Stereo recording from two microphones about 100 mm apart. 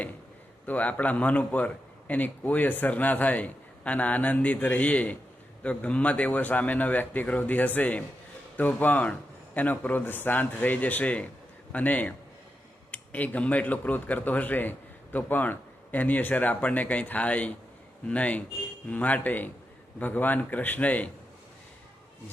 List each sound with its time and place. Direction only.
0.6 s speech: 15° left (ahead or behind)